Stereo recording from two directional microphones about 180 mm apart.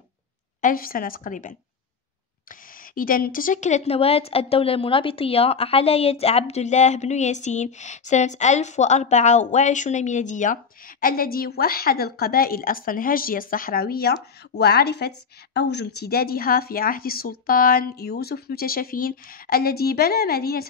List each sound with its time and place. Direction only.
0.6 s a woman's voice: 50° left (ahead or behind)
2.9 s a woman's voice: 50° left (ahead or behind)